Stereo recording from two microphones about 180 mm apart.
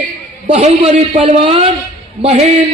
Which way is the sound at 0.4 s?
35° right (ahead or behind).